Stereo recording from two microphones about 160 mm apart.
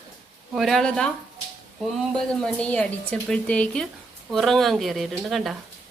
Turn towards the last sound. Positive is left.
turn(degrees=0)  # may be behind; listen again after turning